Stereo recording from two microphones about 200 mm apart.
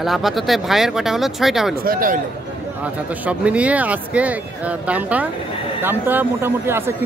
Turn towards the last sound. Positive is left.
turn(degrees=-10)  # may be behind; listen again after turning